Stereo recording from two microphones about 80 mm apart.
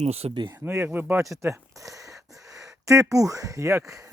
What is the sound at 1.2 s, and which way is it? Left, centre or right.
Speech, right.